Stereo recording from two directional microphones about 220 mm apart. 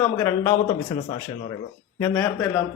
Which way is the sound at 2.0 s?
15° left (ahead or behind).